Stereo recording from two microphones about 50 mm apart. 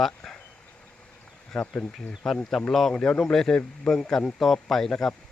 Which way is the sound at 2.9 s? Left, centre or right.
Centre.